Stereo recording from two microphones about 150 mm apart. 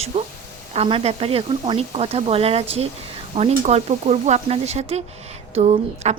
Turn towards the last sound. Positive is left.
turn(degrees=-45)  # may be behind; listen again after turning